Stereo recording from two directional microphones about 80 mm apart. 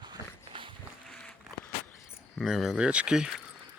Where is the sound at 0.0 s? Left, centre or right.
Right.